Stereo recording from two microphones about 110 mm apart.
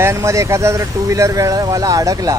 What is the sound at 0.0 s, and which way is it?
Speech, 25° right (ahead or behind).